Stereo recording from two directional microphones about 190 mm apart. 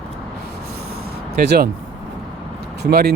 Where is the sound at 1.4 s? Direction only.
60° right (ahead or behind).